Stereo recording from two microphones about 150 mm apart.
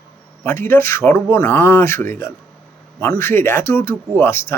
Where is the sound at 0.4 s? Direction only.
15° left (ahead or behind).